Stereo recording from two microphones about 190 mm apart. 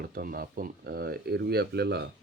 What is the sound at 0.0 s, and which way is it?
Speech, 50° right (ahead or behind).